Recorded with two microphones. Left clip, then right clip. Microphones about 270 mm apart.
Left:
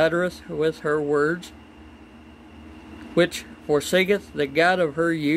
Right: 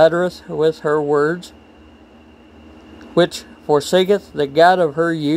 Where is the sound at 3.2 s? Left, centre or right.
Centre.